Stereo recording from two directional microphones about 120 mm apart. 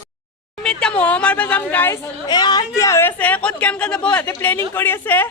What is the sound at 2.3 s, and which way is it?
Speech, 35° left (ahead or behind).